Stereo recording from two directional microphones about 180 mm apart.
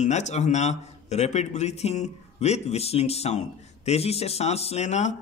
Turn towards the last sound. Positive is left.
turn(degrees=40)  # may be behind; listen again after turning